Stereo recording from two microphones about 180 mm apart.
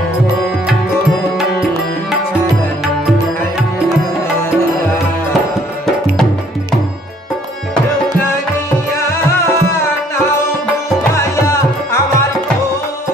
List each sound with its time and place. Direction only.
9.0 s music: 15° left (ahead or behind)
11.1 s music: 15° left (ahead or behind)